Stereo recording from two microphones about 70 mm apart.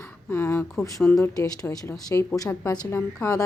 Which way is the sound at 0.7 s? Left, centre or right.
Centre.